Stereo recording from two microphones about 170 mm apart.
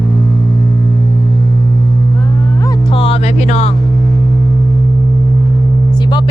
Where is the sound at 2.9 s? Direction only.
35° left (ahead or behind).